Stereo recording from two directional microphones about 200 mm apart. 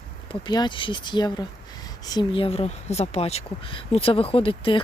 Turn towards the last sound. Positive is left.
turn(degrees=25)  # may be behind; listen again after turning